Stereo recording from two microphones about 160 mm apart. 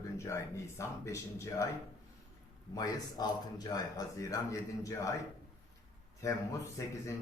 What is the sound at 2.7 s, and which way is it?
Speech, 25° left (ahead or behind).